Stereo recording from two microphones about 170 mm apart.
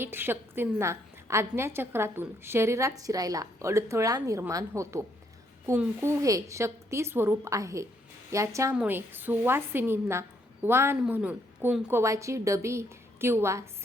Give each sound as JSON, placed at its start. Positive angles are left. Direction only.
{"t": 0.0, "sound": "a woman's voice", "side_deg": -15}